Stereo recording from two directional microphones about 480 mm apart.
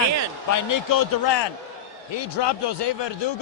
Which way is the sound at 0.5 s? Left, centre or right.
Left.